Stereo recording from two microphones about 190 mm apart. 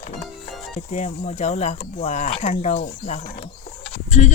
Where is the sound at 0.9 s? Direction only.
40° left (ahead or behind).